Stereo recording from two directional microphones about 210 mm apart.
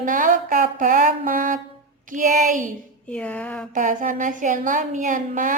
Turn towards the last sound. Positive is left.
turn(degrees=-40)  # may be behind; listen again after turning